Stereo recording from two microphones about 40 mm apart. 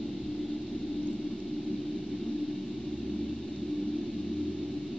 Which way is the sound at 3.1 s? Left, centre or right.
Centre.